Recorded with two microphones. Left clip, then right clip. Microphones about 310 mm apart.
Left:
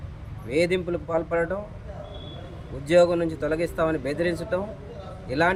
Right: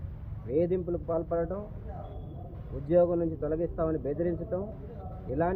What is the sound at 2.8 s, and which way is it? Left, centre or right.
A man's voice, left.